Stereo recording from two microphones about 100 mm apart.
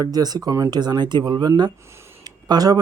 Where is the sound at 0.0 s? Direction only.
40° right (ahead or behind).